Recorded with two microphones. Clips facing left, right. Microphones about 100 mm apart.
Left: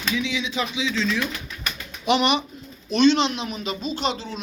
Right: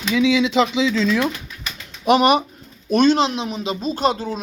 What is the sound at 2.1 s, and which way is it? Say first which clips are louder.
Speech: right 6 dB; 45° right (ahead or behind).